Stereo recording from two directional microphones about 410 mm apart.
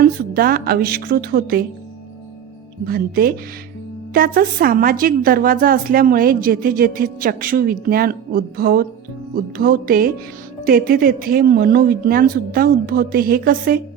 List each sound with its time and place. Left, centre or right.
0.0 s a woman's voice: right
2.8 s a woman's voice: right